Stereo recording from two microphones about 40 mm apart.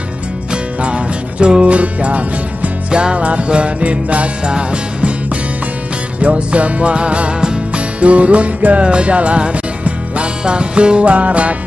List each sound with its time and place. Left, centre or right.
0.7 s music: right
2.9 s music: right